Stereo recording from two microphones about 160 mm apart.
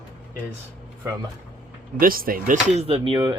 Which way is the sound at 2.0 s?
65° right (ahead or behind).